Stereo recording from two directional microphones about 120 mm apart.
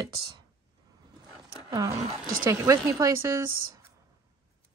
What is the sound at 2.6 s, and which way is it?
Speech, 30° right (ahead or behind).